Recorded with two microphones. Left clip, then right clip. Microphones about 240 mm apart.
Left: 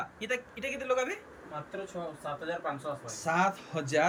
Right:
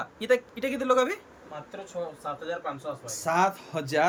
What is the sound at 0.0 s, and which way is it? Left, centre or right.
Speech, right.